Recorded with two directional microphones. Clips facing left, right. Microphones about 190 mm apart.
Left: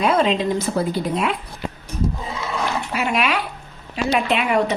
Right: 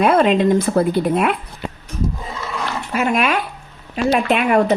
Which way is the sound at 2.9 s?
45° right (ahead or behind).